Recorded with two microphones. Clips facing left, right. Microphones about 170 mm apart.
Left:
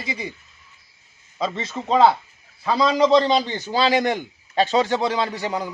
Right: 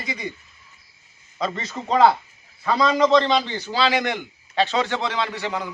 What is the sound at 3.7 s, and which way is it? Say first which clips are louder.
A man's voice: left 3 dB; 40° left (ahead or behind).